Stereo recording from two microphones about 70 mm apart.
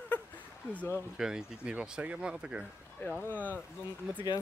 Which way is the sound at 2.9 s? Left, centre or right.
Left.